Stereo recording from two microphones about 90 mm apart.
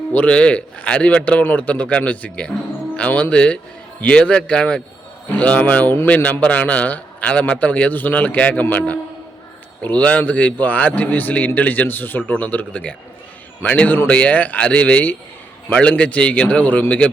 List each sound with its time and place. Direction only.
0.1 s a man's voice: 15° left (ahead or behind)